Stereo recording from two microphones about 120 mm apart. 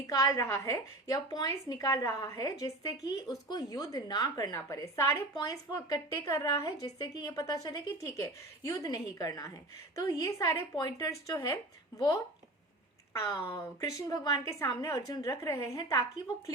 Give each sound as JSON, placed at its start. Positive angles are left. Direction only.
{"t": 0.1, "sound": "a woman's voice", "side_deg": 30}
{"t": 4.5, "sound": "a woman's voice", "side_deg": 25}
{"t": 13.1, "sound": "speech", "side_deg": 25}